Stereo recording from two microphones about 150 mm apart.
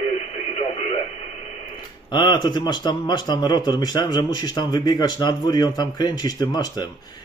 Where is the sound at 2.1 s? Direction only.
30° left (ahead or behind).